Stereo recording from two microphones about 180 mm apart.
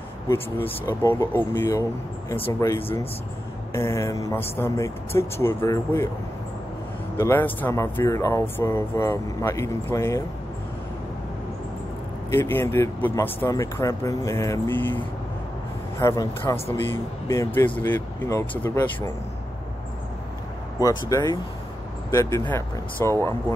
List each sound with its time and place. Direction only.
0.3 s speech: 15° left (ahead or behind)
7.2 s speech: 10° left (ahead or behind)
12.3 s speech: 10° left (ahead or behind)
16.0 s speech: 20° left (ahead or behind)
20.8 s speech: 20° left (ahead or behind)